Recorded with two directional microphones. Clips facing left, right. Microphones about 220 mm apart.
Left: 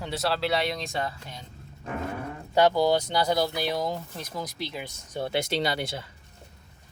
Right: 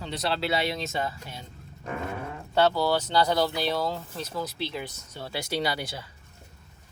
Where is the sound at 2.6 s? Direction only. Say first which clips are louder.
Left 2 dB; 15° left (ahead or behind).